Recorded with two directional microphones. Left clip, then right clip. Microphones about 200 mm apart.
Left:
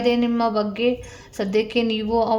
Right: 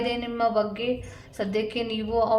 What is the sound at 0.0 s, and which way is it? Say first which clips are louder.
A woman's voice: left 5 dB; 40° left (ahead or behind).